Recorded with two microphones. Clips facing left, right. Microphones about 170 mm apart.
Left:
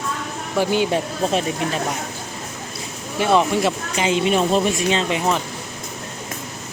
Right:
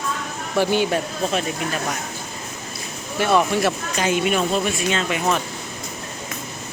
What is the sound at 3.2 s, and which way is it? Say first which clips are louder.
Speech: left 1 dB; 20° left (ahead or behind).